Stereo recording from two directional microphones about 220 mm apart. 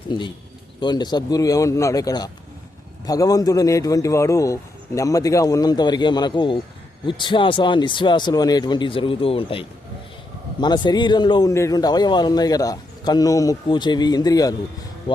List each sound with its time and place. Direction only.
0.1 s a man's voice: 20° left (ahead or behind)